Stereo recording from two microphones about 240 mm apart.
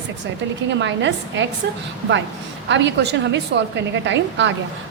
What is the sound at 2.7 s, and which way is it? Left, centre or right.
A woman's voice, right.